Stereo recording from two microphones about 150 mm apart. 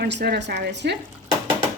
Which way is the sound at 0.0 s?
90° right.